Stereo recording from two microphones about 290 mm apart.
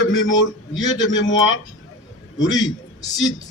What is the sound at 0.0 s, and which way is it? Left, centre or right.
A man's voice, left.